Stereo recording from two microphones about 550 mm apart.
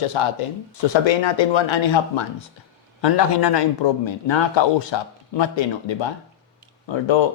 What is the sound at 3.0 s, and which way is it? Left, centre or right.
Speech, left.